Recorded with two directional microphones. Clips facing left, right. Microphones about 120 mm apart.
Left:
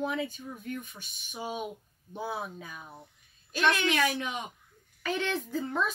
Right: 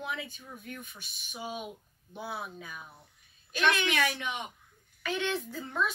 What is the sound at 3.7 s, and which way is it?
A woman's voice, 35° left (ahead or behind).